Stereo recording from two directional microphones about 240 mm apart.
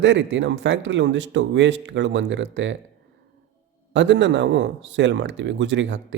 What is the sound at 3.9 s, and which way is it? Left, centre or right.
A man's voice, right.